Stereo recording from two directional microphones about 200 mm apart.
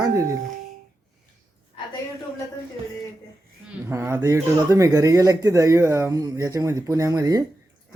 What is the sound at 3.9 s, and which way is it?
Speech, 15° right (ahead or behind).